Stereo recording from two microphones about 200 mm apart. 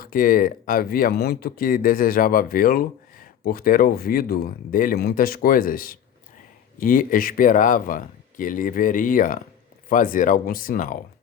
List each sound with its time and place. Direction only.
0.0 s speech: 45° left (ahead or behind)